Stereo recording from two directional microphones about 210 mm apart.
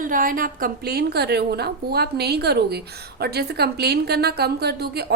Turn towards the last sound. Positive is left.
turn(degrees=-50)  # may be behind; listen again after turning